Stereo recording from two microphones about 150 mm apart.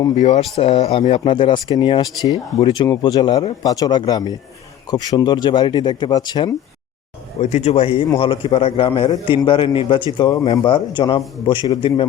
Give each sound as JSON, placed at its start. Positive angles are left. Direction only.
{"t": 0.2, "sound": "speech", "side_deg": 50}
{"t": 7.3, "sound": "a man's voice", "side_deg": 45}